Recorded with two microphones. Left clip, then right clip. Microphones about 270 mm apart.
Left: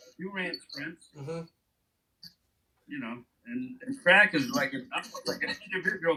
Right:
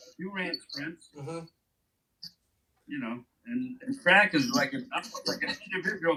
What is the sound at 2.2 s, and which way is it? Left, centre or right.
Hiccup, centre.